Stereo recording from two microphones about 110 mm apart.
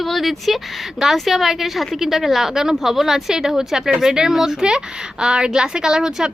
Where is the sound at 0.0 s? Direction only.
Centre (ahead or behind).